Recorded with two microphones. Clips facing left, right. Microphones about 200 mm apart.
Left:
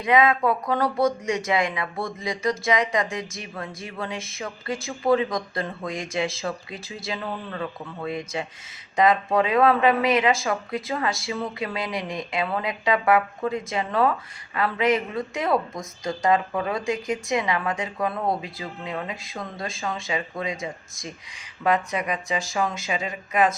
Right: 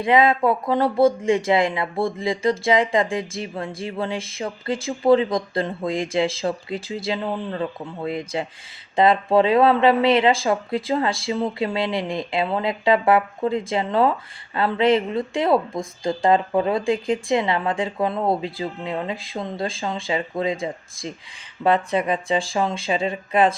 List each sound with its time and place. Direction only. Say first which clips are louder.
0.0 s speech: right 3 dB; 30° right (ahead or behind)